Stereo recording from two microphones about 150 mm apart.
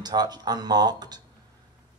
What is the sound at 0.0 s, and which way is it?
Speech, 25° right (ahead or behind).